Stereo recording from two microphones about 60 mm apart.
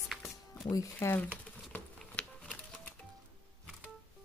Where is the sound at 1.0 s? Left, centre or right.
Left.